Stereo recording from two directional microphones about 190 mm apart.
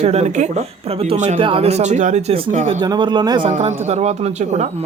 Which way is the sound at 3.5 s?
35° right (ahead or behind).